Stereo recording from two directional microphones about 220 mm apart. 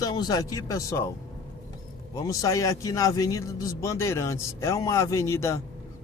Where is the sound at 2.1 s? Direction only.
15° left (ahead or behind).